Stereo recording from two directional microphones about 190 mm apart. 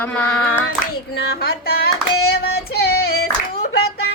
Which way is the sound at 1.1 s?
60° left (ahead or behind).